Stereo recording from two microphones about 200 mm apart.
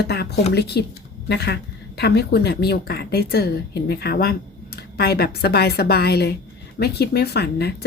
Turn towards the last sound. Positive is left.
turn(degrees=55)  # may be behind; listen again after turning